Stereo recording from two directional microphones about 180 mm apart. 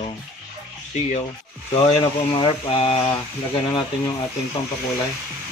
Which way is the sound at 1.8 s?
30° left (ahead or behind).